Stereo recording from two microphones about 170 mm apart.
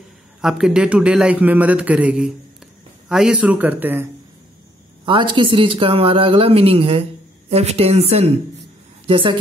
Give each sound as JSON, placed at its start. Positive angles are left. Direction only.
{"t": 0.4, "sound": "a man's voice", "side_deg": 0}
{"t": 5.0, "sound": "a woman's voice", "side_deg": -30}